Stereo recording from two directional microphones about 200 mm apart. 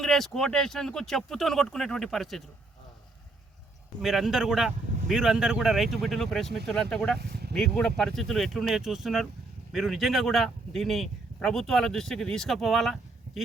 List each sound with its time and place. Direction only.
0.0 s a man's voice: centre (ahead or behind)
4.0 s a man's voice: centre (ahead or behind)
7.2 s speech: 55° right (ahead or behind)
7.5 s a man's voice: 5° left (ahead or behind)